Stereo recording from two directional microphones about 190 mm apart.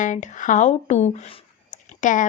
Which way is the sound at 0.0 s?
40° left (ahead or behind).